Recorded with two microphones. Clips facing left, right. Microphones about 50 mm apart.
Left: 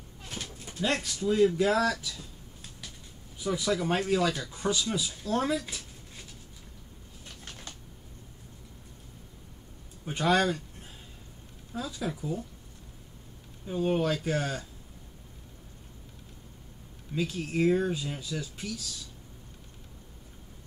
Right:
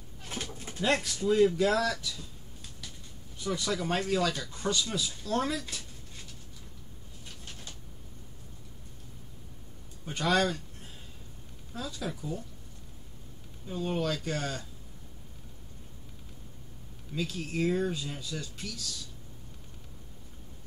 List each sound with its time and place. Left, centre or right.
0.7 s speech: centre
10.0 s speech: centre
11.7 s speech: centre
13.7 s speech: centre
17.1 s speech: centre